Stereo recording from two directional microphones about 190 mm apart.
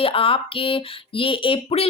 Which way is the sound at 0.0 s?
30° left (ahead or behind).